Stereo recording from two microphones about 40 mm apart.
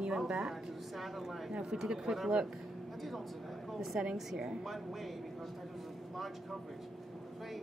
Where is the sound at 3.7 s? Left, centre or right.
Centre.